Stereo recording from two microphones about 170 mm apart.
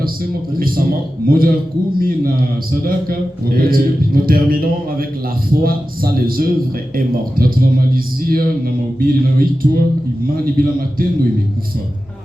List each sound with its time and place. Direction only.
0.6 s a man's voice: 60° right (ahead or behind)